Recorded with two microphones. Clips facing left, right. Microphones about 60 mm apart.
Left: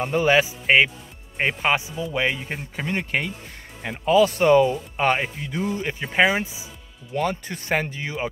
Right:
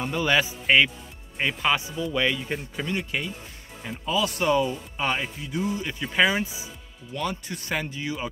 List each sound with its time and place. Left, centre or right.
0.0 s a man's voice: left
7.2 s speech: left